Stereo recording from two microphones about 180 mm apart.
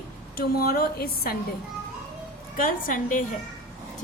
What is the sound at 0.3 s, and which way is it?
A woman's voice, 55° left (ahead or behind).